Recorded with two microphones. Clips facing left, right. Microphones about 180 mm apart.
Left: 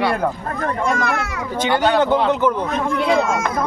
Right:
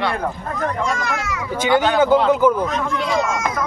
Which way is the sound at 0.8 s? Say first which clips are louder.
Left 3 dB; 60° left (ahead or behind).